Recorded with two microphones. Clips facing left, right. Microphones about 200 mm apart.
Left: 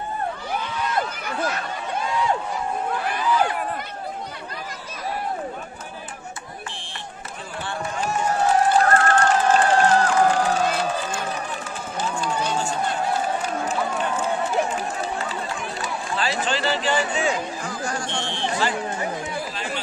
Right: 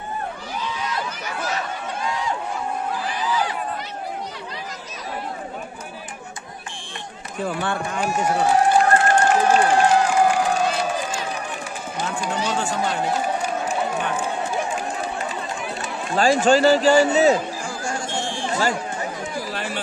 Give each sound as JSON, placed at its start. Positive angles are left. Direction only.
{"t": 0.6, "sound": "a sound", "side_deg": 55}
{"t": 7.4, "sound": "run", "side_deg": -55}
{"t": 8.0, "sound": "run", "side_deg": -10}
{"t": 16.2, "sound": "a man's voice", "side_deg": -45}
{"t": 19.5, "sound": "chatter", "side_deg": -55}